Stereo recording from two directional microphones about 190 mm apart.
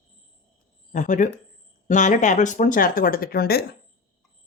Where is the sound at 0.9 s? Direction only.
40° left (ahead or behind).